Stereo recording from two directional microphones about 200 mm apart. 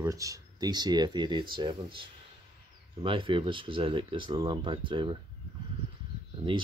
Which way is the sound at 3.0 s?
25° right (ahead or behind).